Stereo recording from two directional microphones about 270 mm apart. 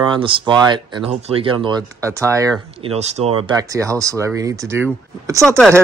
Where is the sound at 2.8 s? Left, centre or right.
Right.